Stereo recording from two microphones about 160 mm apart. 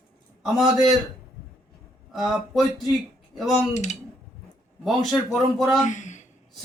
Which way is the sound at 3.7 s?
45° left (ahead or behind).